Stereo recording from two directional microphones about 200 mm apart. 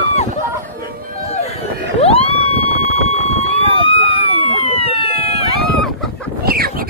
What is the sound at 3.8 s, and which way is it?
Police car, 25° left (ahead or behind).